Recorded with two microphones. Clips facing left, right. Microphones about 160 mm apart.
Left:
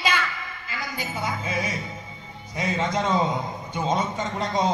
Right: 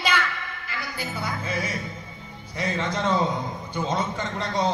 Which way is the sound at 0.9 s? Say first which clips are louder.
Left 2 dB; 15° left (ahead or behind).